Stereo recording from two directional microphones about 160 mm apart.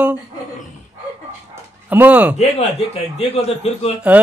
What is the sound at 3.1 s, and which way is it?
Speech, 40° left (ahead or behind).